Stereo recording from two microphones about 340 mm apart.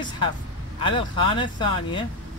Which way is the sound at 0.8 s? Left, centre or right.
Centre.